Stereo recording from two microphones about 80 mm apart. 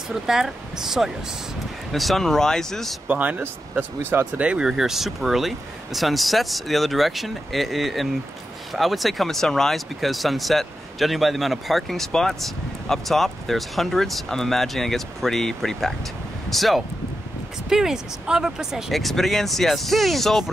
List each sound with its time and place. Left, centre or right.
0.3 s speech: centre
3.1 s speech: centre
4.4 s speech: centre